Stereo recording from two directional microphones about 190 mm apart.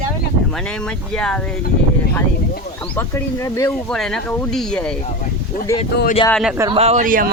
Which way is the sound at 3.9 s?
5° left (ahead or behind).